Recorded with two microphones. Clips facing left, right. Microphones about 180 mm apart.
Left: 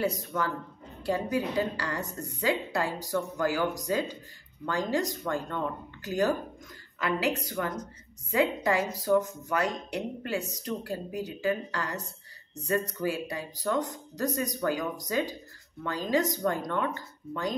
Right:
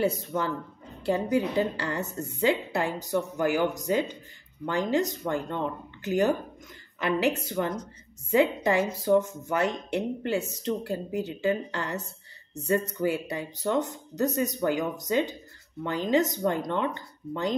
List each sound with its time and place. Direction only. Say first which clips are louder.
0.0 s a woman's voice: right 3 dB; 25° right (ahead or behind)